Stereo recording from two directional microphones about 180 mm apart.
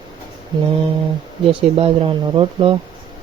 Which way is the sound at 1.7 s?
30° right (ahead or behind).